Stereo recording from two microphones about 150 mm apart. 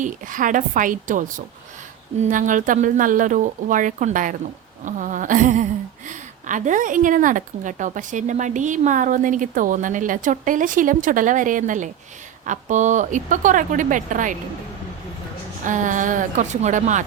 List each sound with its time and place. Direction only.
0.0 s a woman's voice: 60° right (ahead or behind)
15.6 s a woman's voice: 55° right (ahead or behind)